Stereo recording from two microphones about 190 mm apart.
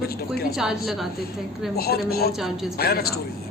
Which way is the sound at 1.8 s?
55° left (ahead or behind).